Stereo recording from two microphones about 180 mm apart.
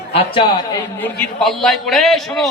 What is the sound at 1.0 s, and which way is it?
A man's voice, 10° left (ahead or behind).